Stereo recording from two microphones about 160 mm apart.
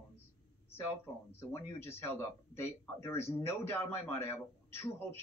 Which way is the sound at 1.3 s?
15° left (ahead or behind).